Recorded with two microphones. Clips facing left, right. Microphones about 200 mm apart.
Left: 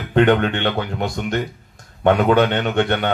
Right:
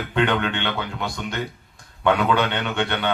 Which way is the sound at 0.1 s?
45° left (ahead or behind).